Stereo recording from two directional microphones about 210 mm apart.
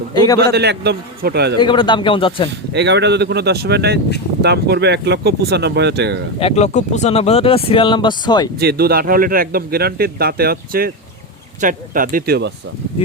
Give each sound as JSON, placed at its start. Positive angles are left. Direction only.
{"t": 0.1, "sound": "speech", "side_deg": 20}
{"t": 0.3, "sound": "a man's voice", "side_deg": -50}
{"t": 1.5, "sound": "speech", "side_deg": 20}
{"t": 2.7, "sound": "a man's voice", "side_deg": -55}
{"t": 6.4, "sound": "speech", "side_deg": 30}
{"t": 8.5, "sound": "a man's voice", "side_deg": -45}